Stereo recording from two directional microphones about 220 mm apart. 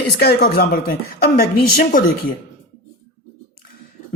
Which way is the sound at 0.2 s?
45° left (ahead or behind).